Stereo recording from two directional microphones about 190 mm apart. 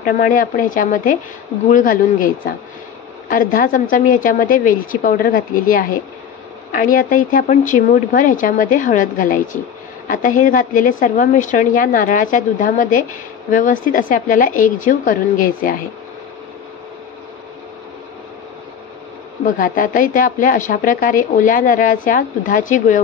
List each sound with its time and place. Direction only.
0.0 s a woman's voice: 45° left (ahead or behind)
19.4 s a woman's voice: 45° left (ahead or behind)